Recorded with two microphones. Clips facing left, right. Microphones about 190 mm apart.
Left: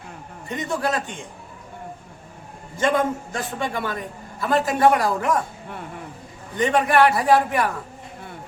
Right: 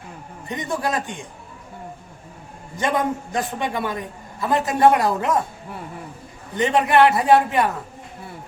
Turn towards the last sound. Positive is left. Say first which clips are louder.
# right 2 dB
turn(degrees=-20)  # may be behind; listen again after turning